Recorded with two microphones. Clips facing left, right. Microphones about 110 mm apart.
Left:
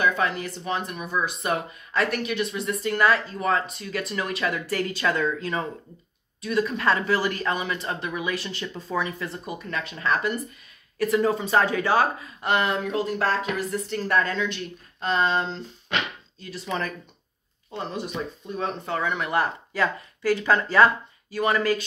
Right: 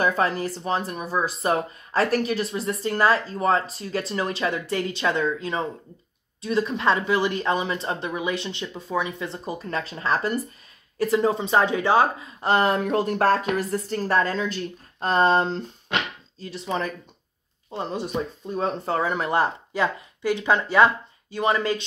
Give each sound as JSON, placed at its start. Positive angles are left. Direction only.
{"t": 0.0, "sound": "speech", "side_deg": -40}
{"t": 9.3, "sound": "speech", "side_deg": -30}
{"t": 16.3, "sound": "speech", "side_deg": -30}